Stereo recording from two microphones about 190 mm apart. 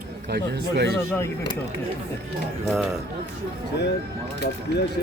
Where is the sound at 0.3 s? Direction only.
60° right (ahead or behind).